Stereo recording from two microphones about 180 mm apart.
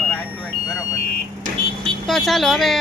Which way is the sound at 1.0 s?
55° left (ahead or behind).